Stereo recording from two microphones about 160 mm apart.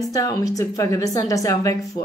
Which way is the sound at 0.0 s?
20° left (ahead or behind).